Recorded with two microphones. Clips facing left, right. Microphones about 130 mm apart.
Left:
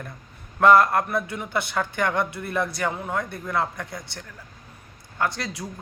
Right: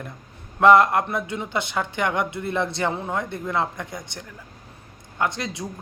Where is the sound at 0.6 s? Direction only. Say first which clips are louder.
Right 1 dB; 20° right (ahead or behind).